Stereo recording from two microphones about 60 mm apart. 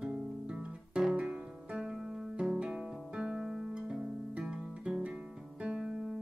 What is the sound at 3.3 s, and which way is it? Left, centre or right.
Music, centre.